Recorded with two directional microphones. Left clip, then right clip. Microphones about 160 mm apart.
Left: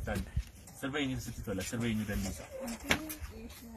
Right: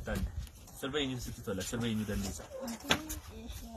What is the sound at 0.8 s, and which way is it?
Speech, 20° right (ahead or behind).